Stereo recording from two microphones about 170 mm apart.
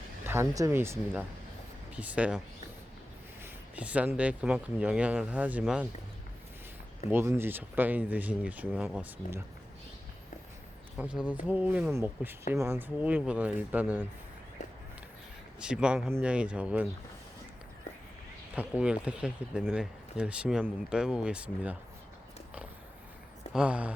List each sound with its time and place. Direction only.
0.3 s speech: 15° right (ahead or behind)
3.4 s speech: 5° right (ahead or behind)
7.1 s speech: 15° right (ahead or behind)
10.9 s speech: 10° right (ahead or behind)
15.6 s speech: 5° right (ahead or behind)
18.5 s speech: 10° right (ahead or behind)
23.5 s speech: 5° right (ahead or behind)